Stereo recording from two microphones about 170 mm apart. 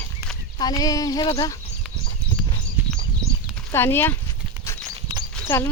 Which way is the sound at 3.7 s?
15° left (ahead or behind).